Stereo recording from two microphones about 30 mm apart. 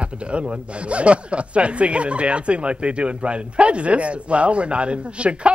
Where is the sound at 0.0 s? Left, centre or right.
Right.